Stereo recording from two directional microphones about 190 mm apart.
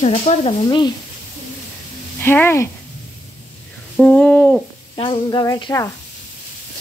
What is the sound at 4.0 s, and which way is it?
Owl, 5° left (ahead or behind).